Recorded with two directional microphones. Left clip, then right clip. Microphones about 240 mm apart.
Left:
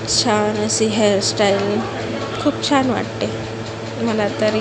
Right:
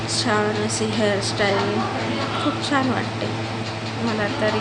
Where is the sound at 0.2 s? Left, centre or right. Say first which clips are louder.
Left 3 dB; left.